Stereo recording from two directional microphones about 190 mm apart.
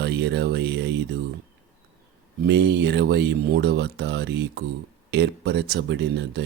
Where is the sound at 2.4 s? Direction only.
60° right (ahead or behind).